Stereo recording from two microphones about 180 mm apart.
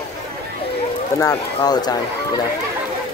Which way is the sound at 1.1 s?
20° left (ahead or behind).